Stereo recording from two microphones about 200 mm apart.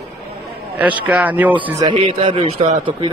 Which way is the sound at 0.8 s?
5° right (ahead or behind).